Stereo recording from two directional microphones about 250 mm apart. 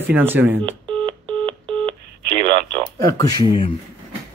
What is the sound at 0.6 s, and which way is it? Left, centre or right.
Speech, right.